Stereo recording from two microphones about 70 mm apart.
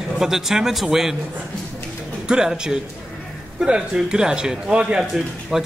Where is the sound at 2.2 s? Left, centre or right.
Centre.